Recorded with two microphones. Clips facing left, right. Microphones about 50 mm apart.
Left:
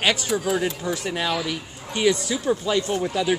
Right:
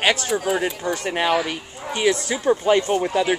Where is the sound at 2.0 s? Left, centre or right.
Centre.